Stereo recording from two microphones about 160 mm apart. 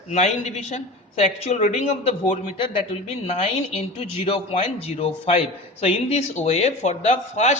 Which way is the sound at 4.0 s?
40° left (ahead or behind).